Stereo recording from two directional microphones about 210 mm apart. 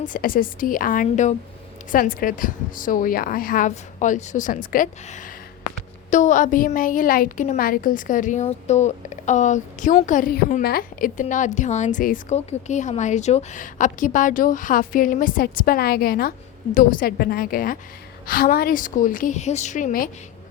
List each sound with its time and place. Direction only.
0.0 s a woman's voice: 40° left (ahead or behind)
5.7 s a sound: 35° left (ahead or behind)
6.1 s a woman's voice: 35° left (ahead or behind)